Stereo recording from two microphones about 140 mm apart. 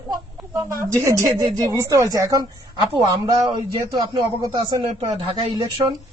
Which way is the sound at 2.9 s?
40° right (ahead or behind).